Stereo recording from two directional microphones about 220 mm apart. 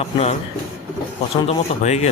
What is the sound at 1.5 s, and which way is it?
Speech, 30° left (ahead or behind).